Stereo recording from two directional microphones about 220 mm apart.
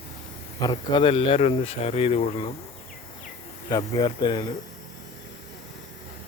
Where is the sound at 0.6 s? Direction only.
20° left (ahead or behind).